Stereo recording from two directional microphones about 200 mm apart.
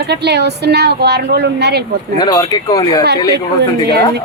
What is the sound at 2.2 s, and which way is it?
Speech, 20° left (ahead or behind).